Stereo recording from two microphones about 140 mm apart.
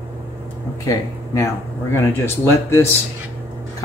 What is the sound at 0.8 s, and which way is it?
Speech, 20° left (ahead or behind).